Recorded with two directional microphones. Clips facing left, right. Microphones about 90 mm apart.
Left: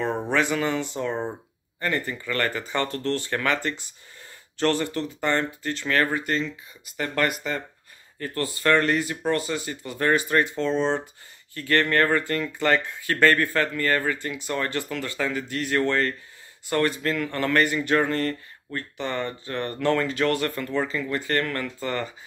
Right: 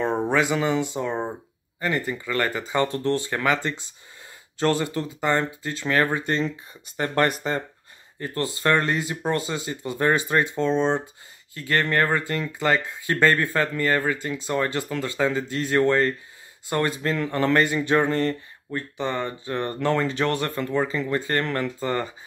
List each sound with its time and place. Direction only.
0.0 s speech: 15° right (ahead or behind)
6.4 s speech: 35° right (ahead or behind)
8.2 s speech: 25° right (ahead or behind)